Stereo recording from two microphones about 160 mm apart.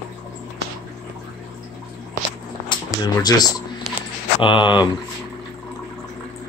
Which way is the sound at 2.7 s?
25° left (ahead or behind).